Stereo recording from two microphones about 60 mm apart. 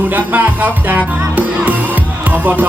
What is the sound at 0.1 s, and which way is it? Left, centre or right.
Music, right.